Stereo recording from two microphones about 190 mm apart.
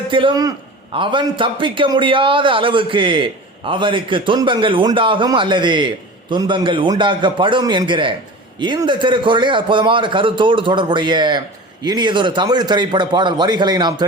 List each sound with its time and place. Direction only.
0.1 s a man's voice: 25° right (ahead or behind)